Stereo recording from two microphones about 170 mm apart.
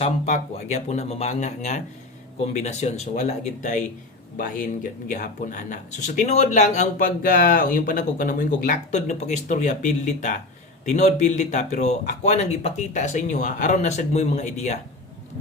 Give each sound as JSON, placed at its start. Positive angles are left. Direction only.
{"t": 0.0, "sound": "speech", "side_deg": 40}
{"t": 7.2, "sound": "speech", "side_deg": 55}